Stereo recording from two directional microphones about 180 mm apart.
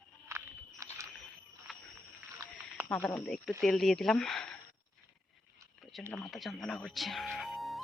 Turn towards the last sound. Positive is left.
turn(degrees=0)  # may be behind; listen again after turning